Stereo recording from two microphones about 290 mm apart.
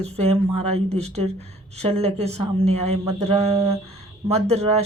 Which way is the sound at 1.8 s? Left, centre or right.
Right.